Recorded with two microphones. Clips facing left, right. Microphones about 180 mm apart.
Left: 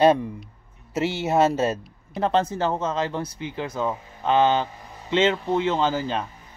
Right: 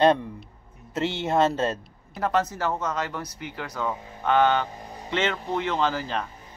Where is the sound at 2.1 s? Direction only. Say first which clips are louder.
Left 3 dB; 25° left (ahead or behind).